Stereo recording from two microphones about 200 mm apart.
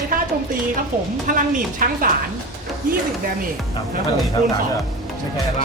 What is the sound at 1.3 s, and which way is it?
Speech, 45° right (ahead or behind).